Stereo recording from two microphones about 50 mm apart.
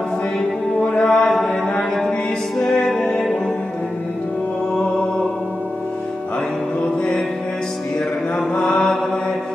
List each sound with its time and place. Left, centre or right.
0.9 s a sound: centre
2.9 s music: centre
8.5 s mantra: centre